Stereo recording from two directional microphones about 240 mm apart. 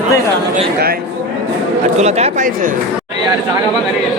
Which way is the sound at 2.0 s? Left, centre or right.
Right.